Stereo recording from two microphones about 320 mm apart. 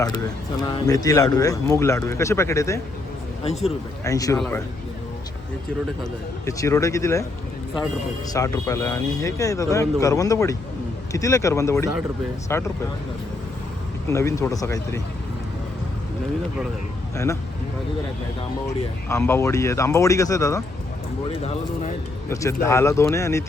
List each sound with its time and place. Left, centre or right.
0.9 s speech: centre
4.0 s speech: centre
6.0 s speech: centre
8.3 s speech: centre
14.1 s speech: centre
19.0 s speech: centre
22.3 s speech: centre